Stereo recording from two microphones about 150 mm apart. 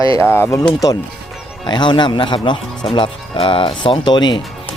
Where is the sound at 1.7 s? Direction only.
30° left (ahead or behind).